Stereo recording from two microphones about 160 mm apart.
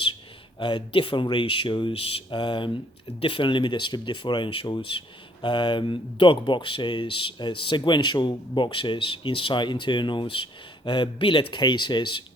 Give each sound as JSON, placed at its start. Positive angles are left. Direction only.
{"t": 0.6, "sound": "speech", "side_deg": 30}